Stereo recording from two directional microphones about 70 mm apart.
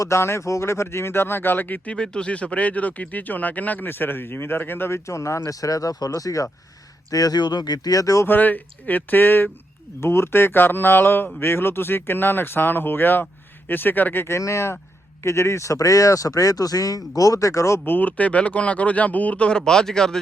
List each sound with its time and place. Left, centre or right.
0.0 s speech: left
5.0 s speech: left
5.5 s speech: left
8.3 s speech: left
17.8 s speech: left; by 20.1 s centre